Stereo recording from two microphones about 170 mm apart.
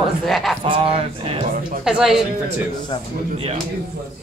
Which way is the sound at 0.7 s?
35° right (ahead or behind).